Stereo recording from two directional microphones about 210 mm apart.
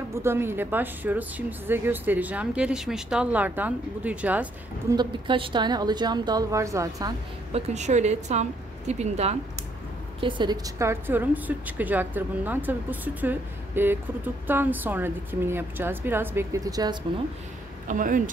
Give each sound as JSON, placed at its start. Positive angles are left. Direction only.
{"t": 0.1, "sound": "a woman's voice", "side_deg": -10}
{"t": 4.9, "sound": "a woman's voice", "side_deg": -25}
{"t": 7.5, "sound": "a woman's voice", "side_deg": -30}
{"t": 17.8, "sound": "a woman's voice", "side_deg": -40}